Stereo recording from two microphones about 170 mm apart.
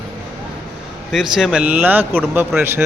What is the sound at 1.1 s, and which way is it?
Speech, centre (ahead or behind).